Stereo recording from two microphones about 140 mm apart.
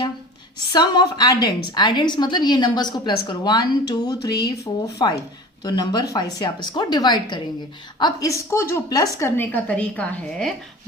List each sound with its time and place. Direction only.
0.7 s a woman's voice: 30° left (ahead or behind); by 10.5 s 5° left (ahead or behind)